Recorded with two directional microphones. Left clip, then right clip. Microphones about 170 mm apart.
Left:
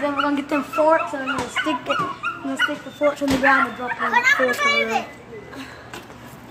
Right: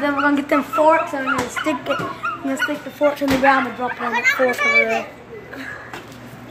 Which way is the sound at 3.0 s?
Centre (ahead or behind).